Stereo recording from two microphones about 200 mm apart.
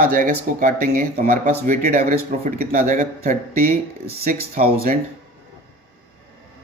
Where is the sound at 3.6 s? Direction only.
50° right (ahead or behind).